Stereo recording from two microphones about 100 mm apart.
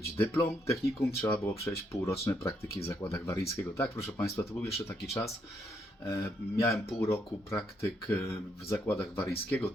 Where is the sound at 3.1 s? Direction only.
30° left (ahead or behind).